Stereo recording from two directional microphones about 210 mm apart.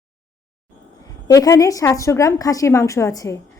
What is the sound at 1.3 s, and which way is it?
A woman's voice, 15° left (ahead or behind).